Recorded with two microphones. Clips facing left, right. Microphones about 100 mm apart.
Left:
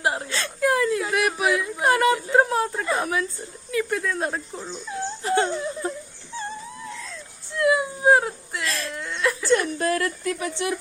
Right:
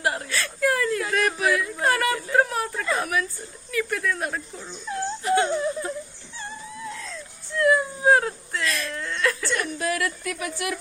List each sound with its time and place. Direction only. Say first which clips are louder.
0.0 s a woman's voice: left 1 dB; 25° left (ahead or behind)
7.5 s speech: even; 20° left (ahead or behind)
8.6 s speech: right 1 dB; 30° left (ahead or behind)
8.9 s speech: left 3 dB; 20° left (ahead or behind)
9.5 s a woman's voice: left 5 dB; 35° left (ahead or behind)